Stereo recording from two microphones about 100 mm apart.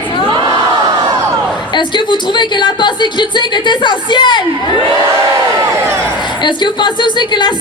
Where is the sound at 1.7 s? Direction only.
50° left (ahead or behind).